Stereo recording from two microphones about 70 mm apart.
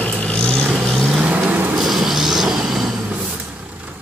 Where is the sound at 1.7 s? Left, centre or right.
Centre.